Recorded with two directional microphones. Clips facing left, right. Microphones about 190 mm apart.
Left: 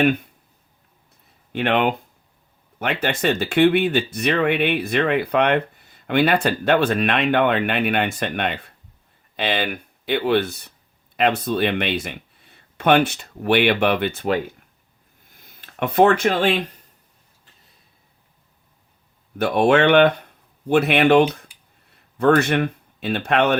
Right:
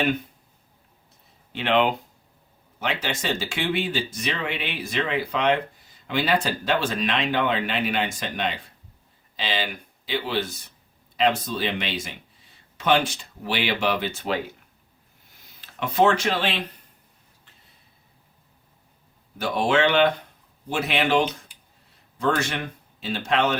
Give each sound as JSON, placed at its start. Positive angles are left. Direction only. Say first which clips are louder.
{"t": 1.5, "sound": "speech", "louder": "left 2 dB", "side_deg": 55}
{"t": 19.4, "sound": "speech", "louder": "left 5 dB", "side_deg": 60}